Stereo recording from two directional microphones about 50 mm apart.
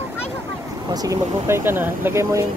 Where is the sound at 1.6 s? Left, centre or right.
Right.